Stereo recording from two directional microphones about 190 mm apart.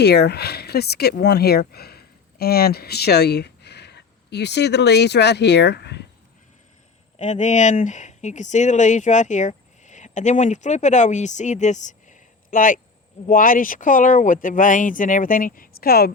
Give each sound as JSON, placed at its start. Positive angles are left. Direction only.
{"t": 0.0, "sound": "speech", "side_deg": 60}
{"t": 7.2, "sound": "speech", "side_deg": 40}